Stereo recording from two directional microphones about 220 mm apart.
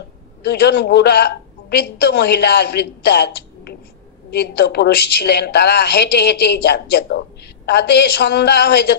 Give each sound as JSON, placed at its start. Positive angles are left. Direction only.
{"t": 0.4, "sound": "a woman's voice", "side_deg": 50}